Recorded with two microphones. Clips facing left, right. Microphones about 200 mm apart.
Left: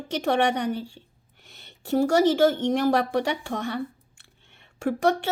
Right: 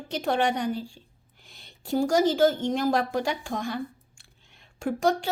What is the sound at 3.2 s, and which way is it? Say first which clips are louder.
Speech: left 2 dB; 70° left (ahead or behind).